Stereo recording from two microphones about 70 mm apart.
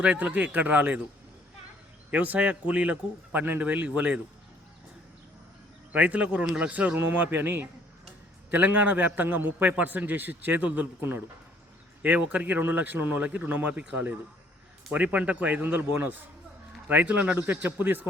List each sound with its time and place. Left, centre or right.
0.0 s a man's voice: centre
2.0 s a man's voice: right
5.9 s a man's voice: centre